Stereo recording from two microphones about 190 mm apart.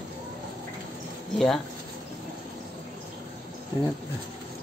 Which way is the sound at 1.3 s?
Centre (ahead or behind).